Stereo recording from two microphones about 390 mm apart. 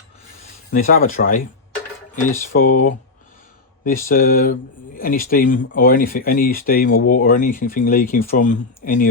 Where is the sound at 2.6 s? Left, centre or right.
Left.